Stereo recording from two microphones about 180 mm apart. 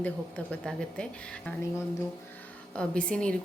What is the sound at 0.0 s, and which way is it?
A woman's voice, 5° left (ahead or behind).